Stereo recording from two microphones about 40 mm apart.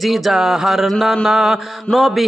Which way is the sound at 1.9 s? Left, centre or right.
Centre.